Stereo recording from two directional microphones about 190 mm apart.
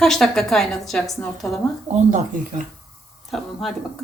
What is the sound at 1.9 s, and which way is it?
Speech, 40° right (ahead or behind).